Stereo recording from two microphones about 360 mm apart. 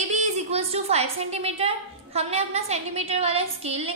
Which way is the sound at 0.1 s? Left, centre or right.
Centre.